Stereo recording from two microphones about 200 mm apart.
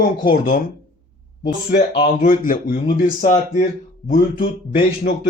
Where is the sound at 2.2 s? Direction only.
45° left (ahead or behind).